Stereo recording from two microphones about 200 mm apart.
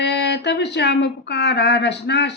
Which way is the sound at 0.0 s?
60° left (ahead or behind).